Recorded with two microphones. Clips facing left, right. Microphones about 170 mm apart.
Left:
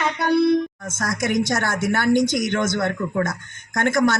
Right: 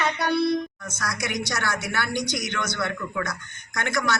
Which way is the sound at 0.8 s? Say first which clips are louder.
Left 6 dB; 50° left (ahead or behind).